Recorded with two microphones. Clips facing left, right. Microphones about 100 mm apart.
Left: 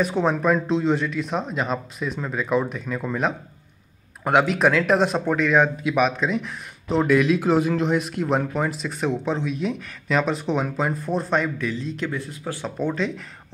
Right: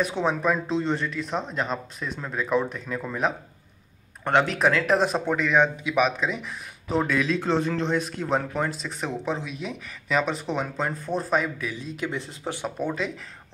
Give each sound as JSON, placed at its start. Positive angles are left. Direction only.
{"t": 0.0, "sound": "speech", "side_deg": 0}
{"t": 12.1, "sound": "speech", "side_deg": -25}
{"t": 12.6, "sound": "speech", "side_deg": -5}